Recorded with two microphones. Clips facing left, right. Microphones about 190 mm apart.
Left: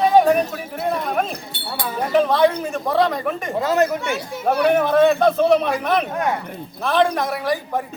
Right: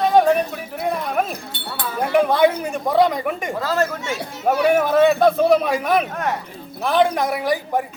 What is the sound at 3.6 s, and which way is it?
Speech, 20° left (ahead or behind).